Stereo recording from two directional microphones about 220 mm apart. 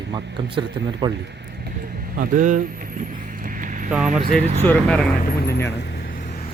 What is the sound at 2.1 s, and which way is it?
Speech, 40° right (ahead or behind).